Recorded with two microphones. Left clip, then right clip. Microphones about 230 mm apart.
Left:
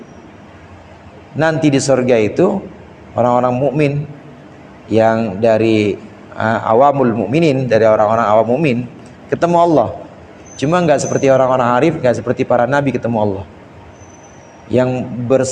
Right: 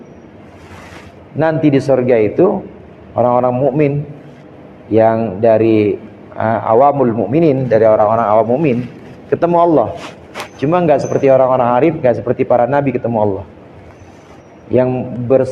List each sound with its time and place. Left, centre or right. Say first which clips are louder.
1.4 s a man's voice: right 1 dB; left
14.7 s a man's voice: right 1 dB; left